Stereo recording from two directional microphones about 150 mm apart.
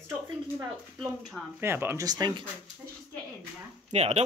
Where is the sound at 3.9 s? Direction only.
45° right (ahead or behind).